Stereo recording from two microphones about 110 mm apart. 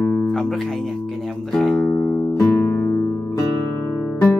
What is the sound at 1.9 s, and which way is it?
Music, 15° left (ahead or behind).